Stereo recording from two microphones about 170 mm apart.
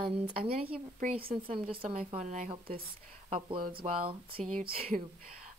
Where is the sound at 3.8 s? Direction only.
45° right (ahead or behind).